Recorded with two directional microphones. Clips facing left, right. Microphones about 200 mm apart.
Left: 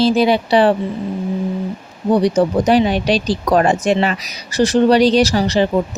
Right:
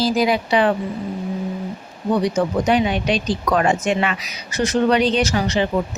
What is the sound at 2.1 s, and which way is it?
Speech, 35° left (ahead or behind).